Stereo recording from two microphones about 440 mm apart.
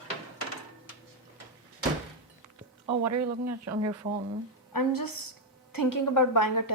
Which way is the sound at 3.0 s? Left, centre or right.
Right.